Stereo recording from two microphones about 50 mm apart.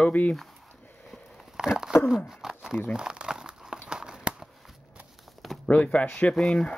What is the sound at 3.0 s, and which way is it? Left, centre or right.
Crumpling, centre.